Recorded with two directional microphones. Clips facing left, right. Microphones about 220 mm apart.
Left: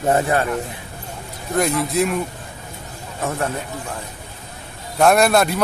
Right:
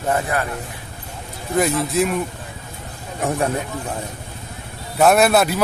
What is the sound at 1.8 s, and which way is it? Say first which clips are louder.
Speech: even; centre (ahead or behind).